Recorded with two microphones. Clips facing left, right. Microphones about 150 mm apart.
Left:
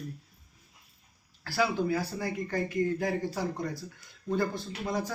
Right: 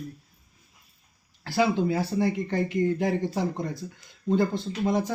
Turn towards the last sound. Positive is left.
turn(degrees=-20)  # may be behind; listen again after turning